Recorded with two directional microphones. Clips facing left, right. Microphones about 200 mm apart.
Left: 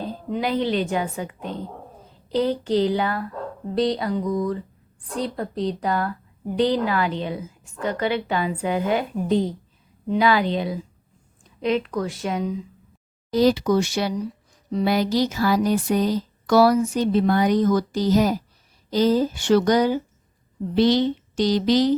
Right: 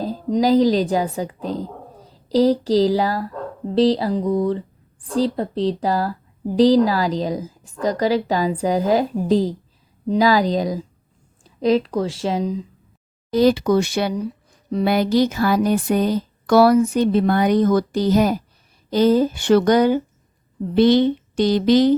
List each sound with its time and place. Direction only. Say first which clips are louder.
0.0 s a woman's voice: right 7 dB; 35° right (ahead or behind)
13.3 s speech: right 3 dB; 55° right (ahead or behind)